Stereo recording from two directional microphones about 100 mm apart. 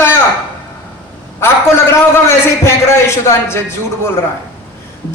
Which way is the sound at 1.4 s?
25° left (ahead or behind).